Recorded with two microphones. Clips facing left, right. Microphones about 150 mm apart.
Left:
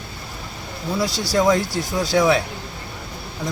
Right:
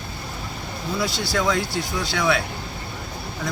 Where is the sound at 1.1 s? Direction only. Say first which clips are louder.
Left 7 dB; 40° left (ahead or behind).